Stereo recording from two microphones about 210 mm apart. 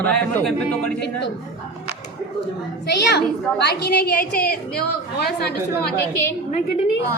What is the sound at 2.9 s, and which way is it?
A woman's voice, 50° left (ahead or behind).